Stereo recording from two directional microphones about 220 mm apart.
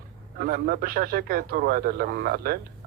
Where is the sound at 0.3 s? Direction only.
40° right (ahead or behind).